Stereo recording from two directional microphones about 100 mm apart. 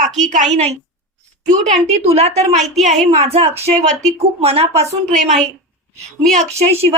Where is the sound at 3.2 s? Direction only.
90° right.